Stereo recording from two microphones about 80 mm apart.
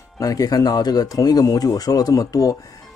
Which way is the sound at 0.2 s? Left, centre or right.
Left.